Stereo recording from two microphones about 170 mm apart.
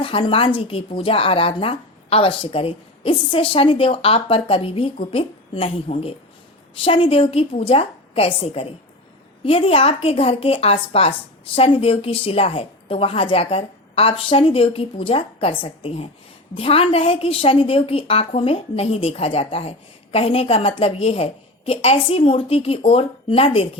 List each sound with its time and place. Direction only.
0.0 s speech: 30° left (ahead or behind)